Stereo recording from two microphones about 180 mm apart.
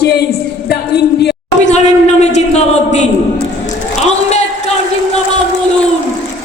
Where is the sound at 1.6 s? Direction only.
40° left (ahead or behind).